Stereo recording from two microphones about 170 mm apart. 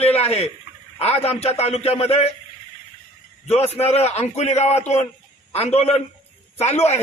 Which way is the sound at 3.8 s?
40° left (ahead or behind).